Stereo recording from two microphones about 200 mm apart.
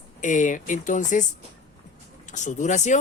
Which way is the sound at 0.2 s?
40° left (ahead or behind).